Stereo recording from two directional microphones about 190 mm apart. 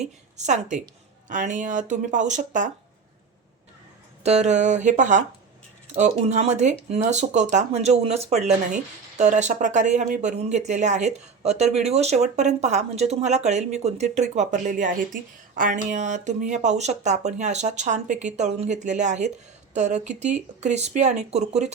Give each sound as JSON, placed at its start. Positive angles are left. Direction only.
{"t": 0.3, "sound": "speech", "side_deg": -40}
{"t": 4.2, "sound": "speech", "side_deg": -35}